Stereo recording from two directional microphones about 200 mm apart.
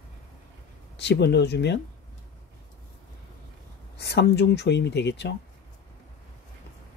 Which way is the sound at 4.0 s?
55° left (ahead or behind).